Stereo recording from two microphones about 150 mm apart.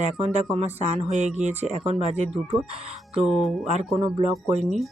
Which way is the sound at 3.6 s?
45° right (ahead or behind).